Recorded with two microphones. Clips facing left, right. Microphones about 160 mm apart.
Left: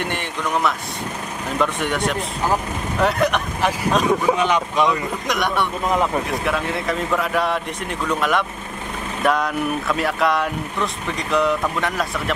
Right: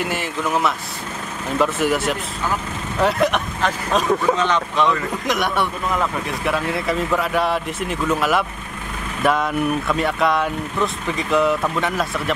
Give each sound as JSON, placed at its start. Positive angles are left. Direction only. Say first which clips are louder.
{"t": 0.0, "sound": "speech", "louder": "right 2 dB", "side_deg": -5}
{"t": 4.2, "sound": "speech", "louder": "even", "side_deg": 10}
{"t": 5.2, "sound": "speech", "louder": "right 1 dB", "side_deg": 0}
{"t": 5.9, "sound": "speech", "louder": "left 3 dB", "side_deg": 25}
{"t": 6.4, "sound": "speech", "louder": "right 1 dB", "side_deg": 0}